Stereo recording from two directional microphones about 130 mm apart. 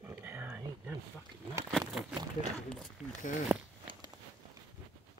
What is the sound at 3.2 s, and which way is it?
Speech, 90° left.